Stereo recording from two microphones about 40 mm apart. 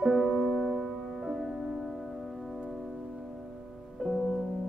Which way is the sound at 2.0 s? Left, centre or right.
Centre.